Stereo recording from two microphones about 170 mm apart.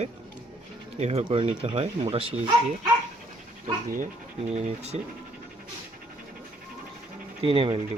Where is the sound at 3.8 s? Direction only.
55° right (ahead or behind).